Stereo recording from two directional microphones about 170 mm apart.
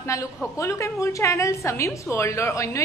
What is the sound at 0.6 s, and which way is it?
A woman's voice, 15° left (ahead or behind).